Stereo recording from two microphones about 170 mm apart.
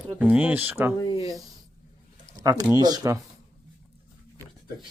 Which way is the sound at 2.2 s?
20° right (ahead or behind).